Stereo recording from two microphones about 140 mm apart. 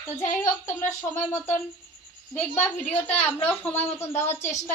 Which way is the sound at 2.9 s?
50° left (ahead or behind).